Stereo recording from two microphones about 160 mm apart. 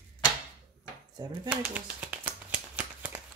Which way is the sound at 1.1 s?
25° right (ahead or behind).